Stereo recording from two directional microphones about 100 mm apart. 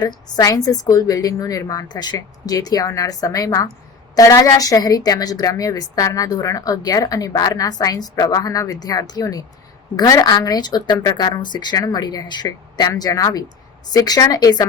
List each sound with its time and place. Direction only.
0.0 s a woman's voice: 40° left (ahead or behind)